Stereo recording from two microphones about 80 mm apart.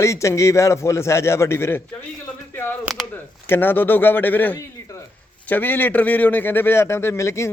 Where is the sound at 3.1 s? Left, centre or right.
Left.